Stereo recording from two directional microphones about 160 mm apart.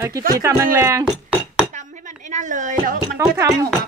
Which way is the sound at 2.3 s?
50° right (ahead or behind).